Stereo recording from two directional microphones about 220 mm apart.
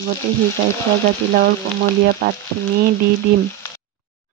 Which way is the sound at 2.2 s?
45° right (ahead or behind).